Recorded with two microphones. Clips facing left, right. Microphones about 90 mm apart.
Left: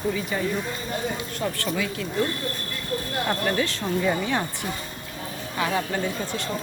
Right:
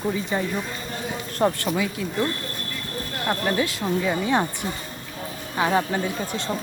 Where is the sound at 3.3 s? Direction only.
10° right (ahead or behind).